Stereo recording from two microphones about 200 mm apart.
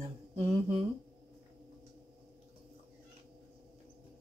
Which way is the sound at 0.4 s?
30° right (ahead or behind).